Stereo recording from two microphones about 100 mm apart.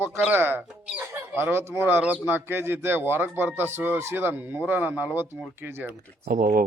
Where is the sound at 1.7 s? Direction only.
20° right (ahead or behind).